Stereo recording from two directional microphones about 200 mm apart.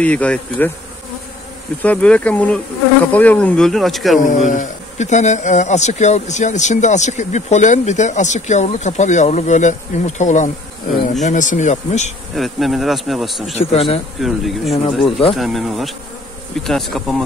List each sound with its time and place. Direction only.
0.0 s speech: 5° left (ahead or behind)
1.8 s speech: 5° left (ahead or behind)
4.5 s speech: 40° left (ahead or behind)
12.4 s speech: centre (ahead or behind)
13.5 s speech: 30° left (ahead or behind)
14.2 s speech: centre (ahead or behind)